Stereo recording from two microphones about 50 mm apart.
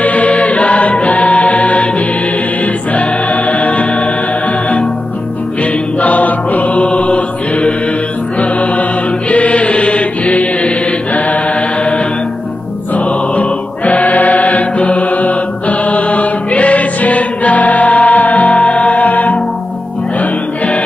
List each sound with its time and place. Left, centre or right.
0.0 s choir: left
2.6 s music: left
5.6 s music: left
9.3 s chant: left
12.9 s choir: left
20.2 s music: left